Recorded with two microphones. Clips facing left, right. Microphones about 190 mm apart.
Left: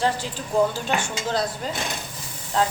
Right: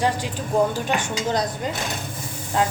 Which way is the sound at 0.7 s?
15° right (ahead or behind).